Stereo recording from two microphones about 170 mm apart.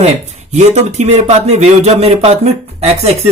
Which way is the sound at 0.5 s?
40° right (ahead or behind).